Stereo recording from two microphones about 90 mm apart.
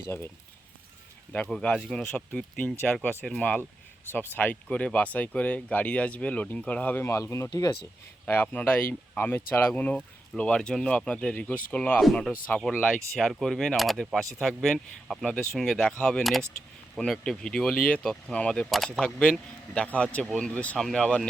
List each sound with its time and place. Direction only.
1.5 s speech: 10° left (ahead or behind)
7.1 s speech: 30° left (ahead or behind); by 11.9 s 15° left (ahead or behind)
11.9 s speech: 5° left (ahead or behind)
12.7 s speech: 15° left (ahead or behind)